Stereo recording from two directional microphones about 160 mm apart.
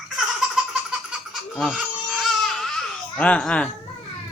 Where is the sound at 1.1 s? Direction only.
5° right (ahead or behind).